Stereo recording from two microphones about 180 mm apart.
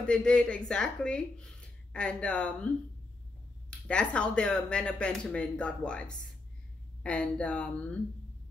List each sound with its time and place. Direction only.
0.0 s speech: 5° left (ahead or behind)
3.8 s speech: 5° left (ahead or behind)